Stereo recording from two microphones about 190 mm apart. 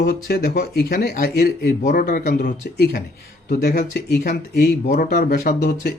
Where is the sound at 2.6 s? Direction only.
60° left (ahead or behind).